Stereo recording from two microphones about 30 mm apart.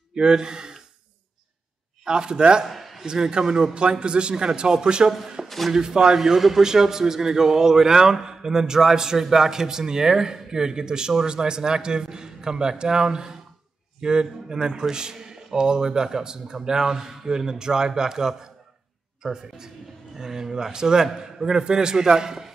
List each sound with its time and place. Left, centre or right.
0.1 s speech: right
2.0 s a man's voice: right
2.6 s a sound: centre
3.1 s a man's voice: right
4.0 s speech: right
5.2 s a sound: centre
5.7 s a man's voice: right
6.1 s a man's voice: centre